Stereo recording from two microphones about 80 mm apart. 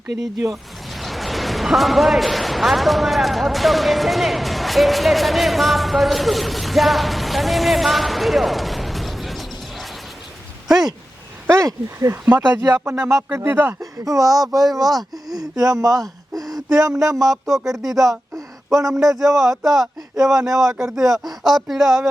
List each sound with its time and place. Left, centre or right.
0.5 s a man's voice: centre
11.4 s speech: right
12.2 s speech: right
14.0 s speech: right
17.3 s speech: centre
18.3 s a sound: right
18.9 s speech: centre